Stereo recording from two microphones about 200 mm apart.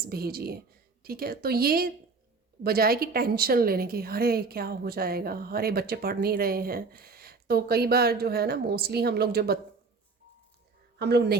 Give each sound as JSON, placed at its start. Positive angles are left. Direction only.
{"t": 0.0, "sound": "a woman's voice", "side_deg": -50}
{"t": 10.9, "sound": "a woman's voice", "side_deg": -55}